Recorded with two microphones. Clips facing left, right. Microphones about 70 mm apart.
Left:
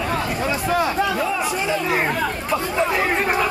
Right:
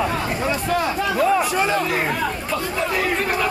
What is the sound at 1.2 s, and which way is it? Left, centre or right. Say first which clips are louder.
Speech: right 4 dB; right.